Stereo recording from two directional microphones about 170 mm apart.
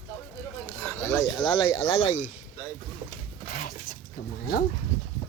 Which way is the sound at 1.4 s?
30° left (ahead or behind).